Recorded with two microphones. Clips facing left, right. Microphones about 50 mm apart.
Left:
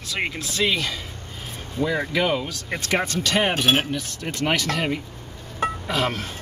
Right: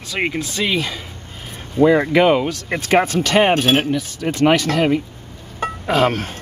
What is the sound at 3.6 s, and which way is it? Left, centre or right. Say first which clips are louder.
Speech: right 4 dB; centre.